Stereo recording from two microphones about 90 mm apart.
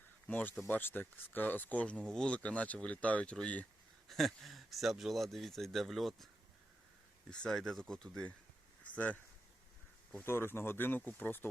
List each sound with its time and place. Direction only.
0.3 s speech: 20° left (ahead or behind)
4.1 s speech: centre (ahead or behind)
7.3 s speech: 5° left (ahead or behind)
8.8 s a sound: 15° left (ahead or behind)
10.1 s speech: 20° left (ahead or behind)